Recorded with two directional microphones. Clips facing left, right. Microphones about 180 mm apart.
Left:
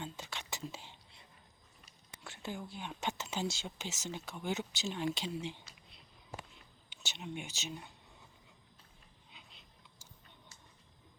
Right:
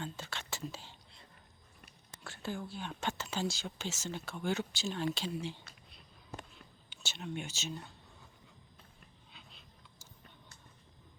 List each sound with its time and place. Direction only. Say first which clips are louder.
0.0 s whispering: right 2 dB; 15° left (ahead or behind)
2.0 s speech: right 2 dB; 20° left (ahead or behind)
6.9 s speech: right 2 dB; 15° left (ahead or behind)
9.3 s a sound: even; 15° left (ahead or behind)